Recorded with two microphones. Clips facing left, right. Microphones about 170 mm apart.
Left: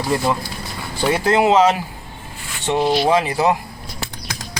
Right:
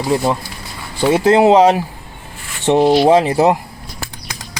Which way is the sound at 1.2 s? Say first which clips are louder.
Right 5 dB; 30° right (ahead or behind).